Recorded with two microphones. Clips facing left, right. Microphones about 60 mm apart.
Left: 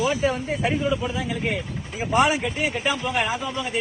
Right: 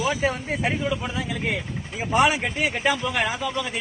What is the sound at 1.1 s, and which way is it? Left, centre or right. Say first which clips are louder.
A man's voice: left 1 dB; right.